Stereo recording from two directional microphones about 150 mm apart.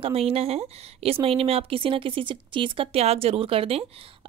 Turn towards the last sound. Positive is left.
turn(degrees=-40)  # may be behind; listen again after turning